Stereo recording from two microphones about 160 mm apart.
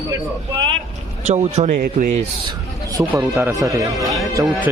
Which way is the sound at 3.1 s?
15° right (ahead or behind).